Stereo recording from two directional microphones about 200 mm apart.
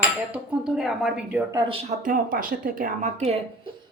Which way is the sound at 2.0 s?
45° right (ahead or behind).